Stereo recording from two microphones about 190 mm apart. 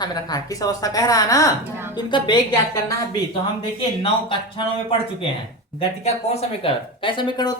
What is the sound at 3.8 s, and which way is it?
Speech, 25° left (ahead or behind).